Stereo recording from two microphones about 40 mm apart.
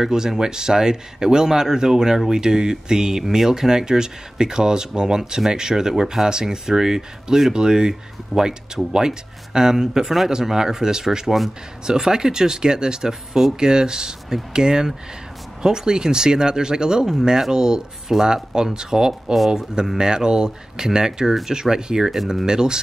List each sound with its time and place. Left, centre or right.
0.0 s speech: centre
18.3 s speech: centre